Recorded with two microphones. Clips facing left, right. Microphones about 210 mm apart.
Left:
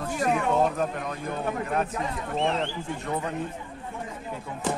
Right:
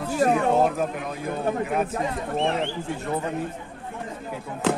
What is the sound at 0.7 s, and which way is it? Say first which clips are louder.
Speech: right 1 dB; 5° right (ahead or behind).